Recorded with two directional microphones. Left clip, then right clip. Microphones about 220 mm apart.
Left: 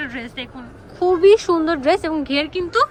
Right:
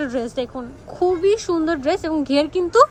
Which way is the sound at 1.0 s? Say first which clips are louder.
Left 5 dB; 10° right (ahead or behind).